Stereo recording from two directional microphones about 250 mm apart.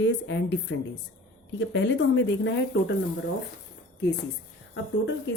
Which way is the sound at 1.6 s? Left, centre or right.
Left.